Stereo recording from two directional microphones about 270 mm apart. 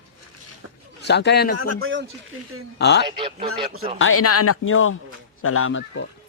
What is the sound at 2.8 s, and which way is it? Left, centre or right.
Speech, left.